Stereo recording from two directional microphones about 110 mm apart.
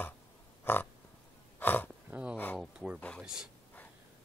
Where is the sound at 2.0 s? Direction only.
10° right (ahead or behind).